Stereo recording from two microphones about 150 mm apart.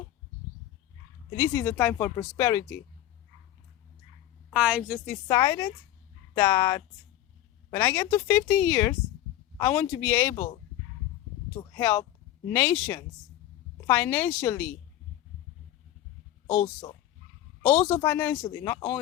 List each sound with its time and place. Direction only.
1.4 s speech: 20° left (ahead or behind)
2.1 s speech: 25° left (ahead or behind)
4.5 s a woman's voice: 5° right (ahead or behind)
5.3 s speech: 25° left (ahead or behind)
11.7 s speech: 15° left (ahead or behind)
17.6 s speech: 10° left (ahead or behind)